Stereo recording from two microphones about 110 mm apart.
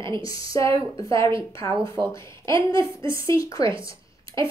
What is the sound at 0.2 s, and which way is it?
A woman's voice, 35° left (ahead or behind).